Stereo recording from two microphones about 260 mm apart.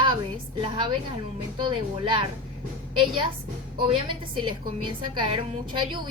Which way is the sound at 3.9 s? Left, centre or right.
Centre.